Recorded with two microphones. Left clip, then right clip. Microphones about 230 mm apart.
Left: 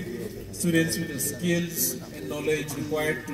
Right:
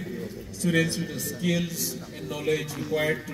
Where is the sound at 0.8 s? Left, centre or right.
Centre.